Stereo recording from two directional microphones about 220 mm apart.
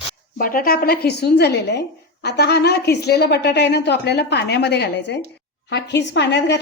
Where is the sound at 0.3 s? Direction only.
40° left (ahead or behind).